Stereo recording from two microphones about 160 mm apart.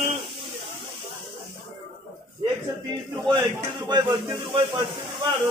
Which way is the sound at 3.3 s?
20° right (ahead or behind).